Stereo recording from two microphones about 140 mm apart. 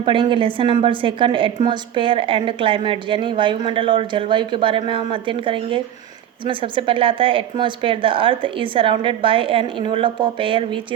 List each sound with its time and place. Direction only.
0.0 s a woman's voice: 35° right (ahead or behind)